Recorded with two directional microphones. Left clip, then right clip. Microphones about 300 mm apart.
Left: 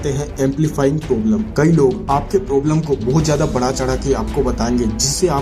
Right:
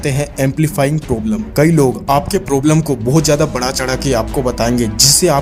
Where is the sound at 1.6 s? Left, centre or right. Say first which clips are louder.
Right 3 dB; right.